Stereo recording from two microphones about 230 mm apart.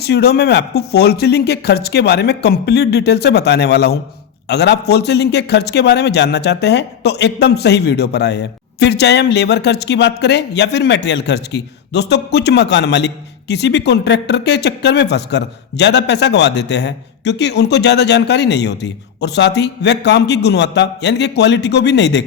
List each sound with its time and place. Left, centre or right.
0.0 s a man's voice: left